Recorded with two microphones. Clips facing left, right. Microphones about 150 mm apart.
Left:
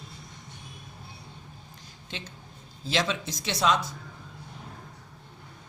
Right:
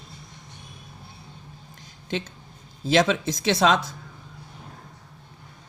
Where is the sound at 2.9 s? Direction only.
55° right (ahead or behind).